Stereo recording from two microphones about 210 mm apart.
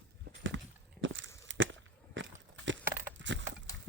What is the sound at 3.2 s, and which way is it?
Wood, 60° right (ahead or behind).